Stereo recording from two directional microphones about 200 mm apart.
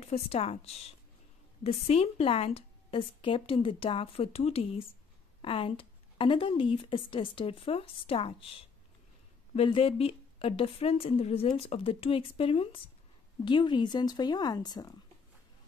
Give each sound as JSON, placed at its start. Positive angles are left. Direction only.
{"t": 0.0, "sound": "a woman's voice", "side_deg": 30}